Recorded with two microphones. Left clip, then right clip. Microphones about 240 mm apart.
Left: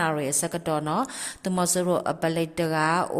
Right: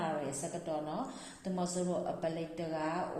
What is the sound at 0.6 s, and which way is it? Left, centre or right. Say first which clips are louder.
A woman's voice: left 12 dB; left.